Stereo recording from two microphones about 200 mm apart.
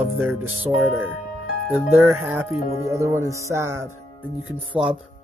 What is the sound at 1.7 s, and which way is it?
Speech, 10° right (ahead or behind).